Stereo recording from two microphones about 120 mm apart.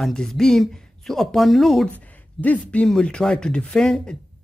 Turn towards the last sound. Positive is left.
turn(degrees=5)  # may be behind; listen again after turning